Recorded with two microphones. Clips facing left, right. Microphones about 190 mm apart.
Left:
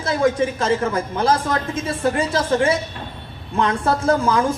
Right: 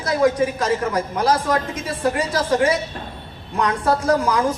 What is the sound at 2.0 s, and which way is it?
A man's voice, 25° left (ahead or behind).